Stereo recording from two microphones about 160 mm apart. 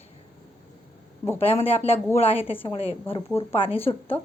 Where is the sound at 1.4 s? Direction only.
35° left (ahead or behind).